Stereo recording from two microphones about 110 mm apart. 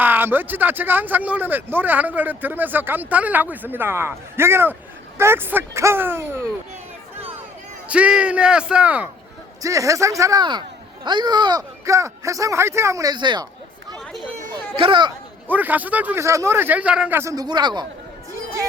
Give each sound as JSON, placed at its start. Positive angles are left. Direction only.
{"t": 0.0, "sound": "speech", "side_deg": -20}
{"t": 7.9, "sound": "speech", "side_deg": -10}
{"t": 9.6, "sound": "speech", "side_deg": -30}
{"t": 11.0, "sound": "speech", "side_deg": -45}
{"t": 11.9, "sound": "speech", "side_deg": -30}
{"t": 13.1, "sound": "speech", "side_deg": -45}
{"t": 14.8, "sound": "speech", "side_deg": -50}
{"t": 15.4, "sound": "speech", "side_deg": -15}
{"t": 16.2, "sound": "speech", "side_deg": -25}
{"t": 17.2, "sound": "a man's voice", "side_deg": -30}